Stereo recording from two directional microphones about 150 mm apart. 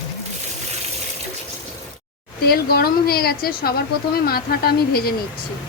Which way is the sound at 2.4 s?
90° left.